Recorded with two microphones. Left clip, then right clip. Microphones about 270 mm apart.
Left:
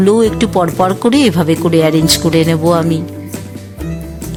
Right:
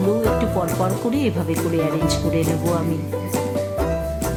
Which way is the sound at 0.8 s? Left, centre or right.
Left.